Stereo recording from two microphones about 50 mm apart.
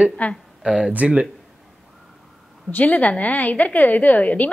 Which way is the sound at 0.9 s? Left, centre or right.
Right.